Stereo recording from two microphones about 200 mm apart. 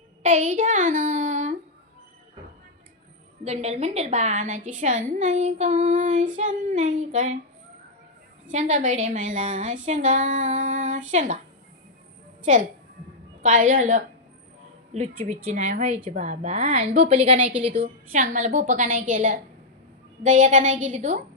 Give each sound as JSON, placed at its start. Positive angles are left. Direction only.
{"t": 0.2, "sound": "child singing", "side_deg": -35}
{"t": 3.4, "sound": "a woman's voice", "side_deg": -30}
{"t": 8.4, "sound": "a woman's voice", "side_deg": -35}
{"t": 9.8, "sound": "female singing", "side_deg": -40}
{"t": 11.1, "sound": "a woman's voice", "side_deg": -40}
{"t": 13.4, "sound": "a woman's voice", "side_deg": -40}
{"t": 15.3, "sound": "a woman's voice", "side_deg": -40}